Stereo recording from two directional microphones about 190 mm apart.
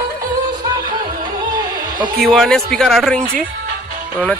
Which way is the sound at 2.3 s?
Centre (ahead or behind).